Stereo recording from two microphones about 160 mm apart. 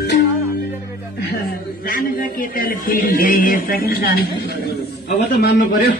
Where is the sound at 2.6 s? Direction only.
65° left (ahead or behind).